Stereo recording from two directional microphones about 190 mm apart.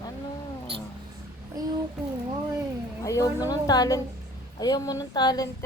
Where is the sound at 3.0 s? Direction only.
15° left (ahead or behind).